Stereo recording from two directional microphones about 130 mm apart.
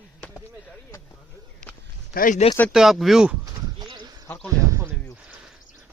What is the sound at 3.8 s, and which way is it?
Horse, 35° right (ahead or behind).